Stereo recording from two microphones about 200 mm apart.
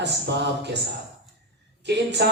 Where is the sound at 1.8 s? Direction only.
60° right (ahead or behind).